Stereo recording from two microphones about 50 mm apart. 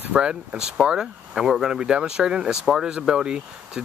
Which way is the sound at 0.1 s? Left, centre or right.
Centre.